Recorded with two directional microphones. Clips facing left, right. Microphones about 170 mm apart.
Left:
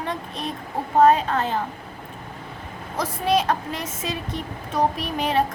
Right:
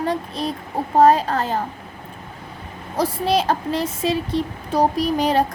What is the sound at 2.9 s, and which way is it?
Speech, 30° right (ahead or behind).